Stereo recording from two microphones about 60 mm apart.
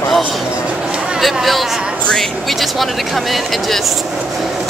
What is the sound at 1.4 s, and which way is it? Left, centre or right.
Speech, centre.